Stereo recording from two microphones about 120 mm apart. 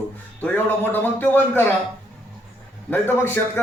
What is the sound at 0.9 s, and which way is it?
Speech, 15° left (ahead or behind).